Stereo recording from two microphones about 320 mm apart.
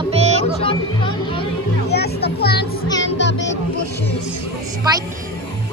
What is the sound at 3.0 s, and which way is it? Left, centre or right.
Music, left.